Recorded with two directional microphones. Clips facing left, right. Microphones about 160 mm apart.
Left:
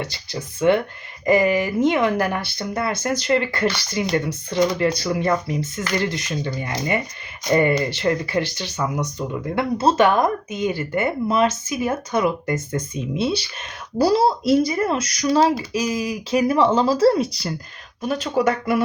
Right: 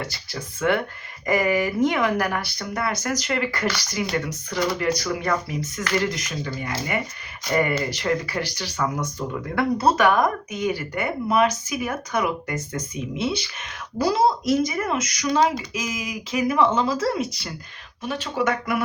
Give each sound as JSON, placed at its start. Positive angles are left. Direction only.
{"t": 0.0, "sound": "speech", "side_deg": 20}